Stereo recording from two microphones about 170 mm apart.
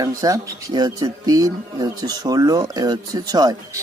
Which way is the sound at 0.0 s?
20° right (ahead or behind).